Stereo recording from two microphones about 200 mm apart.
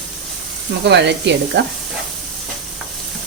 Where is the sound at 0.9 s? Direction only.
60° right (ahead or behind).